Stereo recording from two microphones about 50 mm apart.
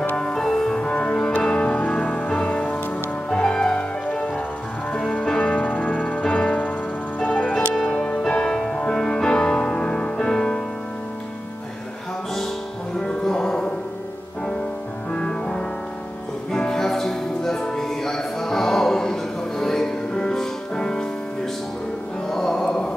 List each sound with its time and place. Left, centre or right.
0.1 s music: centre
3.3 s music: centre
7.7 s music: centre
13.0 s music: centre
15.0 s music: centre
22.3 s music: centre
22.7 s a sound: left